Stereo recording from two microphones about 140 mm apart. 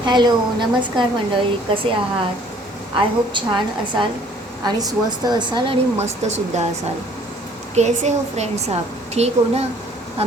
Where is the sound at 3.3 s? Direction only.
35° right (ahead or behind).